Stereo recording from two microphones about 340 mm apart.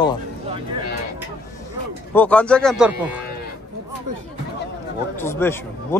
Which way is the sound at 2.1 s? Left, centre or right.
Centre.